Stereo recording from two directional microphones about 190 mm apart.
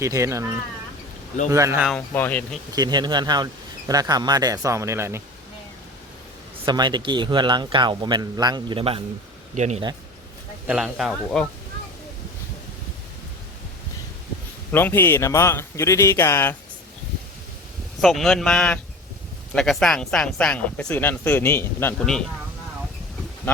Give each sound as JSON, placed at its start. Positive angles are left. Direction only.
{"t": 0.0, "sound": "speech", "side_deg": -15}
{"t": 2.1, "sound": "a man's voice", "side_deg": 10}
{"t": 2.7, "sound": "speech", "side_deg": -20}
{"t": 6.7, "sound": "speech", "side_deg": -25}
{"t": 10.7, "sound": "speech", "side_deg": -5}
{"t": 14.7, "sound": "a man's voice", "side_deg": 10}
{"t": 18.0, "sound": "speech", "side_deg": 0}